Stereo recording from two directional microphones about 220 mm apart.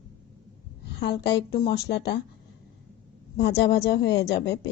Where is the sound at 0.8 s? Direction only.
50° left (ahead or behind).